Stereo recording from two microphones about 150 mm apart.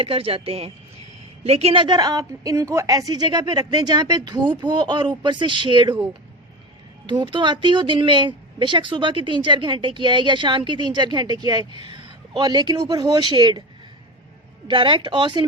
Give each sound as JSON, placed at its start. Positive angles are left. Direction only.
{"t": 0.0, "sound": "a woman's voice", "side_deg": -40}
{"t": 7.1, "sound": "a woman's voice", "side_deg": -30}
{"t": 14.7, "sound": "speech", "side_deg": -35}